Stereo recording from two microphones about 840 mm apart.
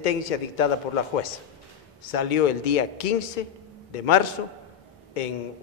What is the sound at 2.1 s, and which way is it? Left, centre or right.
A man's voice, left.